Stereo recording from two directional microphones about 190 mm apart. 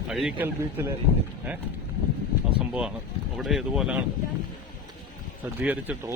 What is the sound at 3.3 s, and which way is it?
Speech, centre (ahead or behind).